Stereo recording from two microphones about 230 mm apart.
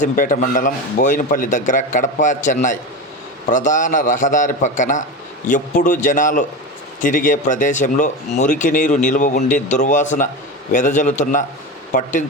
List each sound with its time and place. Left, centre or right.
0.0 s speech: left